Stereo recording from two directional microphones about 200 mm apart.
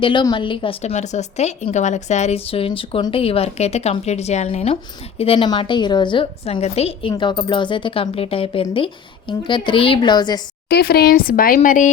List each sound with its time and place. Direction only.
0.0 s speech: 25° left (ahead or behind)
10.7 s speech: 50° left (ahead or behind)